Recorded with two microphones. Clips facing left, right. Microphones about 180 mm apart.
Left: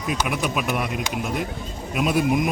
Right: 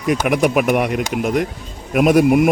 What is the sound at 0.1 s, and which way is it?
Speech, 75° right (ahead or behind).